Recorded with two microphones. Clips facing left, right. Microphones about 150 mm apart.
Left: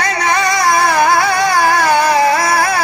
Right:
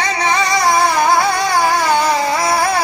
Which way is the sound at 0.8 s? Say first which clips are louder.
Left 1 dB; 55° left (ahead or behind).